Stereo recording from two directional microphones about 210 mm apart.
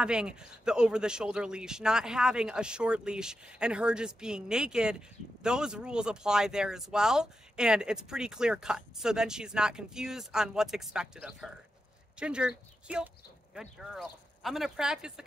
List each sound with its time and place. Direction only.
0.0 s speech: 5° right (ahead or behind)